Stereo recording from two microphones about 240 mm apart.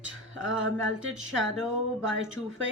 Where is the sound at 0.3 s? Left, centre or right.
Right.